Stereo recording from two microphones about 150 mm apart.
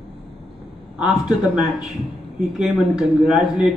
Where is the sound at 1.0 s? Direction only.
5° right (ahead or behind).